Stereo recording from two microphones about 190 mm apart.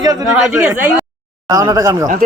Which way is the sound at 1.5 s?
20° right (ahead or behind).